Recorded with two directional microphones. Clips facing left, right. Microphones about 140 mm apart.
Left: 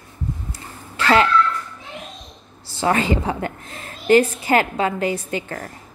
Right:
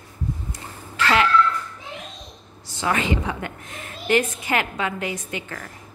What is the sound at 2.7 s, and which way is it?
A woman's voice, 35° left (ahead or behind).